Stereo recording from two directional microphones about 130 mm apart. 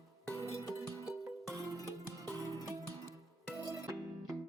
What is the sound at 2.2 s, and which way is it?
Music, 25° right (ahead or behind).